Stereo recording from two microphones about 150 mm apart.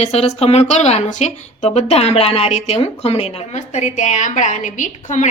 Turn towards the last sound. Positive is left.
turn(degrees=55)  # may be behind; listen again after turning